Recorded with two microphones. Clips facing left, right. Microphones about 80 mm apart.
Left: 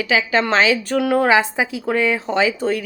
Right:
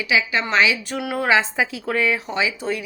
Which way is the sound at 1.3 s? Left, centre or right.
Left.